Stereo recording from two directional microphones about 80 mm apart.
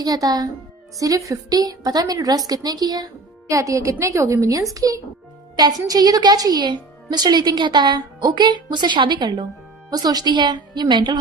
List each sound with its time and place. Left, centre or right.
0.0 s a woman's voice: right
3.6 s a woman's voice: right
9.9 s speech: right